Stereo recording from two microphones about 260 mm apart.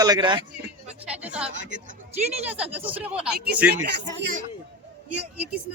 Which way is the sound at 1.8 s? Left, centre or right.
Right.